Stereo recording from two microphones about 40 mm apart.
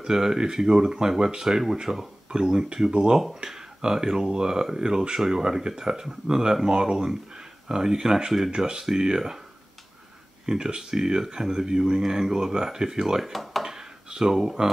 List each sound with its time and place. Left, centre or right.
0.0 s speech: centre
10.4 s speech: centre
13.2 s speech: centre
13.7 s a sound: centre